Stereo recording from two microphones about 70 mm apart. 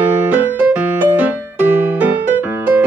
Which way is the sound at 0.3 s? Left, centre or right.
Right.